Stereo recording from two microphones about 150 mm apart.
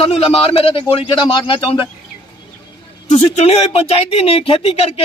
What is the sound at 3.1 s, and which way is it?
A man's voice, 45° left (ahead or behind).